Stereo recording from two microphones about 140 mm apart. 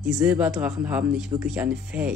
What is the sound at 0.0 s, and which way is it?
Speech, 10° right (ahead or behind).